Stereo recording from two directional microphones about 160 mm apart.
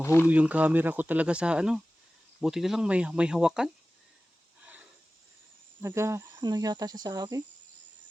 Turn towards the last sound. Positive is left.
turn(degrees=-25)  # may be behind; listen again after turning